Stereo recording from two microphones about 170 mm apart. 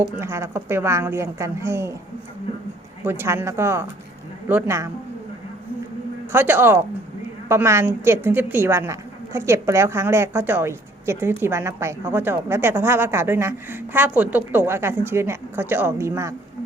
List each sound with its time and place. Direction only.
0.2 s a woman's voice: 15° right (ahead or behind)
3.0 s a woman's voice: 15° right (ahead or behind)
6.3 s a woman's voice: 10° right (ahead or behind)